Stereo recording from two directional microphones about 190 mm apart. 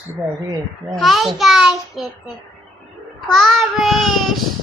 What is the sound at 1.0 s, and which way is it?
Child singing, centre (ahead or behind).